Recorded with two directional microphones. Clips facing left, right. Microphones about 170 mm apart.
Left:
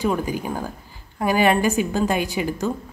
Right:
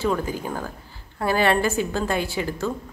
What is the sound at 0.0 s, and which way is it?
A woman's voice, 15° left (ahead or behind).